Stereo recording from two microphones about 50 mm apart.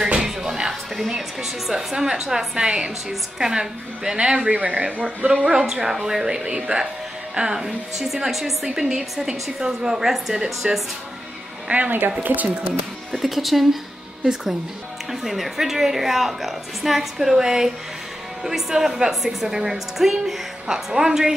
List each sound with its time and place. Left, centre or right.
0.1 s music: centre
0.9 s a woman's voice: centre
4.4 s speech: right
5.7 s a woman's voice: centre
11.7 s speech: right
13.1 s a woman's voice: centre
15.0 s a woman's voice: centre